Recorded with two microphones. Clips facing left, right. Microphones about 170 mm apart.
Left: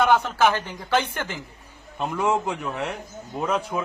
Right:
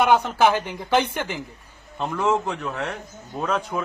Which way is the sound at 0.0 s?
15° right (ahead or behind).